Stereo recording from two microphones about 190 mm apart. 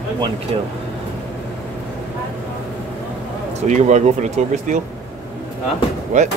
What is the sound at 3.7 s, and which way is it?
Speech, 40° right (ahead or behind).